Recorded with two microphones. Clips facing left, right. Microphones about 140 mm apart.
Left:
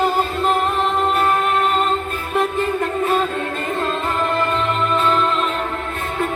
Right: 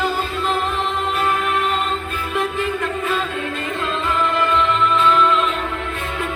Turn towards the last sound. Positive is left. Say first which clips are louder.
# right 2 dB
turn(degrees=40)  # may be behind; listen again after turning